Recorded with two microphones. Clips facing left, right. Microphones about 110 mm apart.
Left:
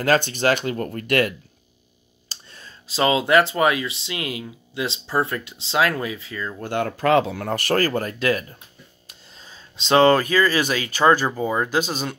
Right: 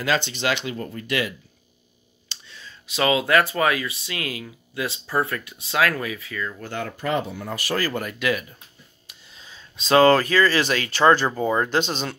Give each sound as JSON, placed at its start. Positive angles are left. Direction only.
{"t": 0.0, "sound": "speech", "side_deg": 45}
{"t": 2.2, "sound": "a sound", "side_deg": 45}
{"t": 2.9, "sound": "speech", "side_deg": 25}
{"t": 6.6, "sound": "speech", "side_deg": 55}
{"t": 8.0, "sound": "speech", "side_deg": 35}